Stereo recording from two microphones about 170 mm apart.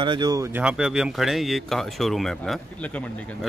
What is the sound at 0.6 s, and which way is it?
Speech, 5° right (ahead or behind).